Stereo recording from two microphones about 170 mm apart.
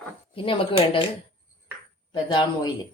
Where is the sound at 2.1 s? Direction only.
25° left (ahead or behind).